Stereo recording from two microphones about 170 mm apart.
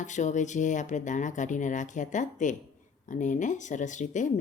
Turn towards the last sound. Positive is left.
turn(degrees=45)  # may be behind; listen again after turning